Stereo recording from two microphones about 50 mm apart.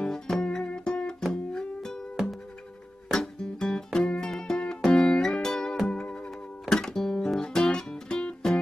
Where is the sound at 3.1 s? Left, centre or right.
Centre.